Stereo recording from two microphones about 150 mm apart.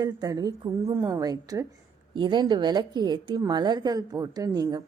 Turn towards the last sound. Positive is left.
turn(degrees=-25)  # may be behind; listen again after turning